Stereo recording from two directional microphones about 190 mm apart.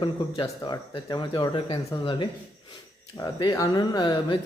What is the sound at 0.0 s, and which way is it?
Speech, 25° left (ahead or behind).